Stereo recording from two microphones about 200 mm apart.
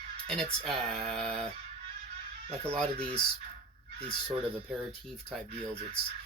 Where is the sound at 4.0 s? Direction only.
30° right (ahead or behind).